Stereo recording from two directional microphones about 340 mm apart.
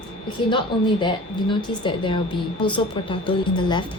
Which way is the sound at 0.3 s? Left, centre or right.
Centre.